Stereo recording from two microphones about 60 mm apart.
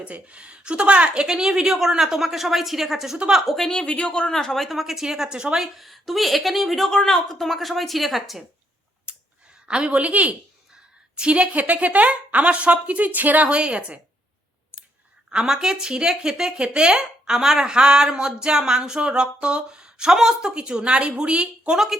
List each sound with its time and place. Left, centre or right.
0.0 s speech: right; by 3.7 s centre
3.7 s speech: centre
9.1 s clicking: centre
9.6 s a woman's voice: centre
15.3 s speech: centre